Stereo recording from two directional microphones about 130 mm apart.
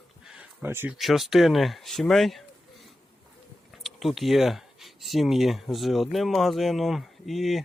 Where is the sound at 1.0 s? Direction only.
Centre (ahead or behind).